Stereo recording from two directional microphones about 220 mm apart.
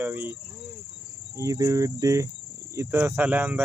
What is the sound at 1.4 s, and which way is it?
Speech, 15° right (ahead or behind).